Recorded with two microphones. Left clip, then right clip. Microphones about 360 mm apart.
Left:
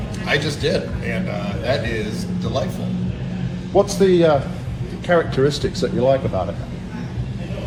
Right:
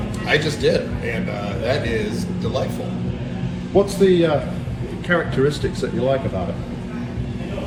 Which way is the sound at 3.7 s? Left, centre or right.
Left.